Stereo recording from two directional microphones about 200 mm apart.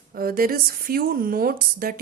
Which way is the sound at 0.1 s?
45° right (ahead or behind).